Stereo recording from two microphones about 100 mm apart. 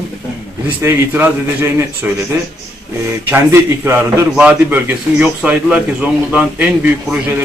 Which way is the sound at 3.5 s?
25° right (ahead or behind).